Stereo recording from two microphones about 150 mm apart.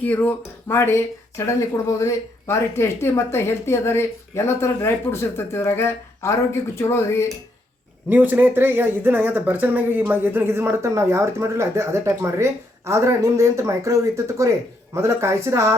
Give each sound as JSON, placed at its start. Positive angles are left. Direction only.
{"t": 0.0, "sound": "speech", "side_deg": 10}
{"t": 8.1, "sound": "a woman's voice", "side_deg": -10}